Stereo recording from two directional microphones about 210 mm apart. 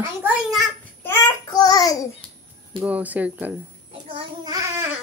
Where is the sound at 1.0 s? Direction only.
15° left (ahead or behind).